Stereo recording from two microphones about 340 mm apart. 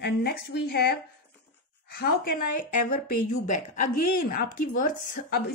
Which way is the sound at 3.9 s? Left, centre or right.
Left.